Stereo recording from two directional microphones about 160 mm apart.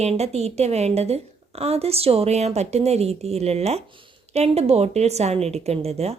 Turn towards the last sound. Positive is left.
turn(degrees=-40)  # may be behind; listen again after turning